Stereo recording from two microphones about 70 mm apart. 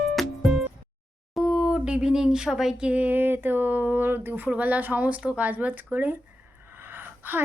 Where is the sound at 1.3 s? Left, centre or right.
Centre; by 6.1 s right.